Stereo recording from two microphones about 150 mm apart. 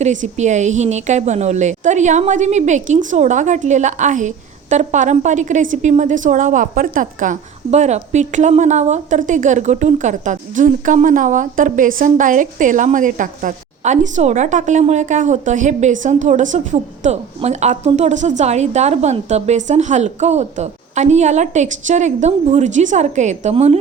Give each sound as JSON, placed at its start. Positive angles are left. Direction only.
{"t": 0.0, "sound": "a woman's voice", "side_deg": -50}